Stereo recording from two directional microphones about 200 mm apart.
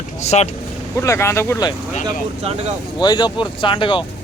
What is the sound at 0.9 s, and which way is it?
Speech, 15° left (ahead or behind).